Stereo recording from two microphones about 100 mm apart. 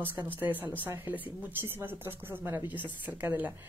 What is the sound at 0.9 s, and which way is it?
A woman's voice, 20° right (ahead or behind).